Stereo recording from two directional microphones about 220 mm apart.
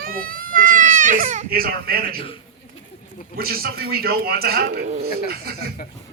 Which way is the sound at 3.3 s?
45° right (ahead or behind).